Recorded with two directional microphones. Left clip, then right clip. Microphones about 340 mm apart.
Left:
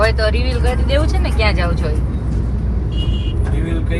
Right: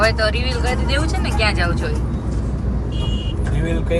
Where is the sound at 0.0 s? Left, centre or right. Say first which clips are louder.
Left 1 dB; centre.